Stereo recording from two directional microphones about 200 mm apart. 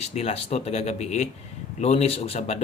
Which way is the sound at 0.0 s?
30° left (ahead or behind).